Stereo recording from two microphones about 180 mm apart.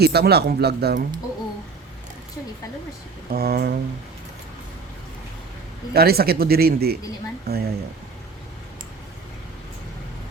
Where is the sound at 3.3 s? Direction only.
60° right (ahead or behind).